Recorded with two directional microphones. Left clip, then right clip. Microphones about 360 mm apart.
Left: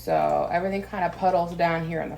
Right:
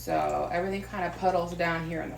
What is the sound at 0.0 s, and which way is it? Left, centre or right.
Speech, left.